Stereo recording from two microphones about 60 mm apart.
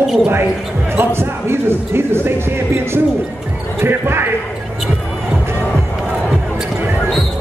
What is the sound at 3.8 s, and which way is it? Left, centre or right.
Speech, right.